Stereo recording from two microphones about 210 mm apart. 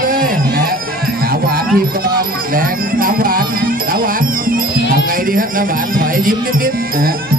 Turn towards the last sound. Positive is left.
turn(degrees=-45)  # may be behind; listen again after turning